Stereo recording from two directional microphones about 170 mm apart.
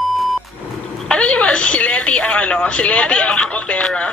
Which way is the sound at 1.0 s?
5° left (ahead or behind).